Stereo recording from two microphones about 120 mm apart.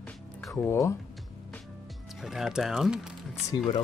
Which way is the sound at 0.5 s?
25° left (ahead or behind).